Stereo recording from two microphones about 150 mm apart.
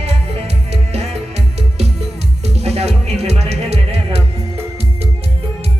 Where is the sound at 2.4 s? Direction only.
45° right (ahead or behind).